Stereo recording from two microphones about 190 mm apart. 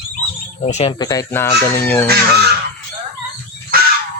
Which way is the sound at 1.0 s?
15° left (ahead or behind).